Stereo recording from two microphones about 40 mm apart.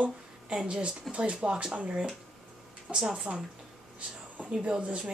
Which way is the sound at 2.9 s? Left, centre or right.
Centre.